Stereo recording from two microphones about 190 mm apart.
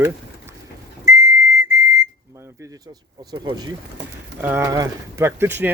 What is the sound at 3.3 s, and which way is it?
Speech, 20° right (ahead or behind).